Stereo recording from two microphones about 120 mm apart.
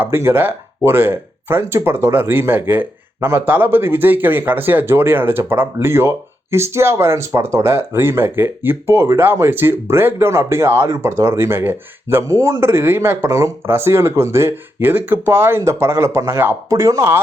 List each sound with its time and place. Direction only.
0.0 s speech: 20° right (ahead or behind)